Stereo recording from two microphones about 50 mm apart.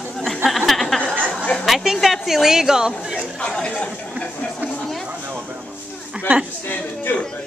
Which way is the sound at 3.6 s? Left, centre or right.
Left.